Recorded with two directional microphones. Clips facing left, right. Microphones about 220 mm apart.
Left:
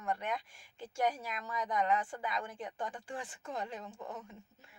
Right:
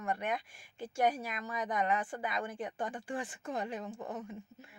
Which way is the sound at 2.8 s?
5° right (ahead or behind).